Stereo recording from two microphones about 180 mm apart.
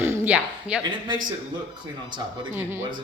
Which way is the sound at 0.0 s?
10° right (ahead or behind).